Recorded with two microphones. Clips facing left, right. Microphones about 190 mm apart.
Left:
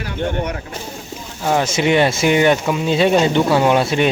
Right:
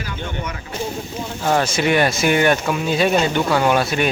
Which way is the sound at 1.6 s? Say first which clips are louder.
Left 2 dB; 20° left (ahead or behind).